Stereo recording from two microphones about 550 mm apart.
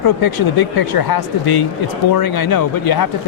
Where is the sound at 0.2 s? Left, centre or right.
Left.